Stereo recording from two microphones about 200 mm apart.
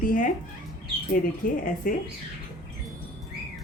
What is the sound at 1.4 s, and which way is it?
Speech, 40° left (ahead or behind).